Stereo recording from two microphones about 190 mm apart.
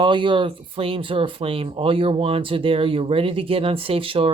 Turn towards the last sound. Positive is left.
turn(degrees=-30)  # may be behind; listen again after turning